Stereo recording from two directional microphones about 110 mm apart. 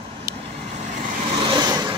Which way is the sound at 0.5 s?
85° right.